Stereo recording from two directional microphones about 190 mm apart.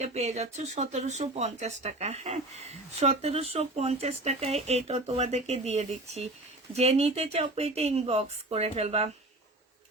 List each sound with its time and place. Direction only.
0.0 s speech: 35° right (ahead or behind)